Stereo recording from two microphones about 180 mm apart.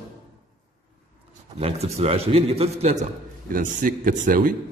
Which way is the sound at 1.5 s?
35° right (ahead or behind).